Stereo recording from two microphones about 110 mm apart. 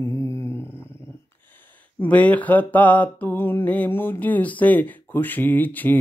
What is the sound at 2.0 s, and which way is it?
Mantra, 15° left (ahead or behind).